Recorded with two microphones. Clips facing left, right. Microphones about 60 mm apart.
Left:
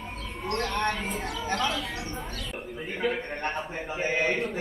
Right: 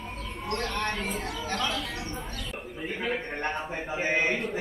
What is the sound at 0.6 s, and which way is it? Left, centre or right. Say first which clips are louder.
Speech: left 3 dB; centre.